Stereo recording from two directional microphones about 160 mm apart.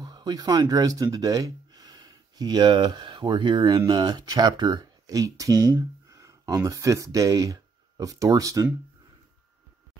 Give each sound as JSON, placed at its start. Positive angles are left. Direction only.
{"t": 0.0, "sound": "speech", "side_deg": -25}